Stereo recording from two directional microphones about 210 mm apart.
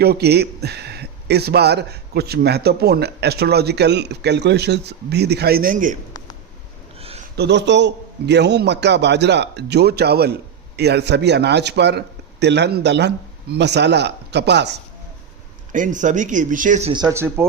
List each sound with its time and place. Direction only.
0.0 s speech: 50° right (ahead or behind)
7.3 s speech: 55° right (ahead or behind)
15.7 s speech: 35° right (ahead or behind)
16.9 s speech: 15° right (ahead or behind)